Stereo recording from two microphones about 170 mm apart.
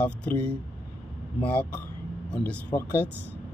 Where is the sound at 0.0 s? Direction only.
5° left (ahead or behind).